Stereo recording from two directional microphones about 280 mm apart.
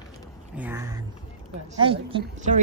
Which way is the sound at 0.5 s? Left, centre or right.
Centre.